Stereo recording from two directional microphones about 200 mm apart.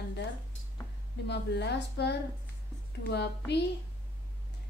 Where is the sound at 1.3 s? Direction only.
55° left (ahead or behind).